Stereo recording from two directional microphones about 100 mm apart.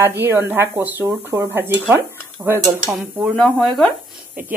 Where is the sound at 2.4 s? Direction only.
10° right (ahead or behind).